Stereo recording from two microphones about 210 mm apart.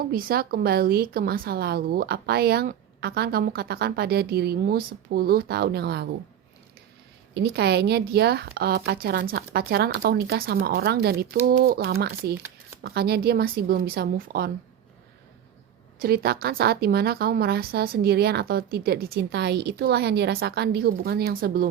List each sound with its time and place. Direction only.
0.1 s a woman's voice: 45° right (ahead or behind)
7.3 s a woman's voice: 50° right (ahead or behind)
16.0 s a woman's voice: 50° right (ahead or behind)